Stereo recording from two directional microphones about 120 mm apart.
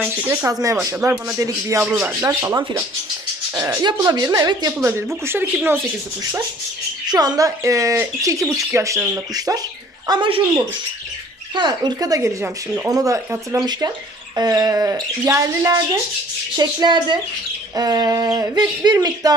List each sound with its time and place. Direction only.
0.4 s speech: 30° right (ahead or behind)
4.3 s a sound: 30° right (ahead or behind)
5.2 s speech: 20° right (ahead or behind)
7.1 s speech: 35° right (ahead or behind)
10.1 s speech: 45° right (ahead or behind)
11.5 s speech: 40° right (ahead or behind)
14.3 s a sound: 35° right (ahead or behind)
15.2 s speech: 25° right (ahead or behind)
16.6 s a sound: 40° right (ahead or behind)